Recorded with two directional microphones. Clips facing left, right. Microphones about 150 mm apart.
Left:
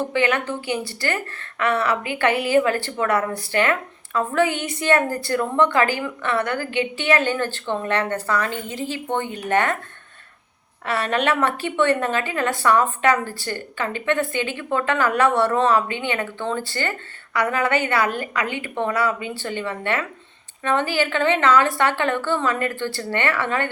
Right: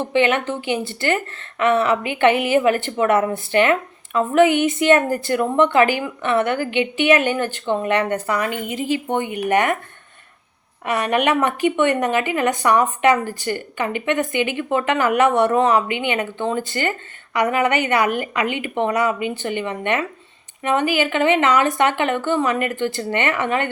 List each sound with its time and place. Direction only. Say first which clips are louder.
0.0 s a woman's voice: right 3 dB; 20° right (ahead or behind)
10.8 s a woman's voice: right 3 dB; 15° right (ahead or behind)